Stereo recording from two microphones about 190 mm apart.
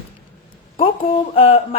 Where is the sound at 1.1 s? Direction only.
30° left (ahead or behind).